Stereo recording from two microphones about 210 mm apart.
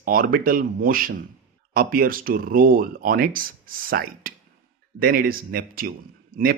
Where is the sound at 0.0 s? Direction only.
45° right (ahead or behind).